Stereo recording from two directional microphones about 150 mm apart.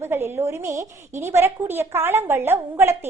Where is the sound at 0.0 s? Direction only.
15° right (ahead or behind).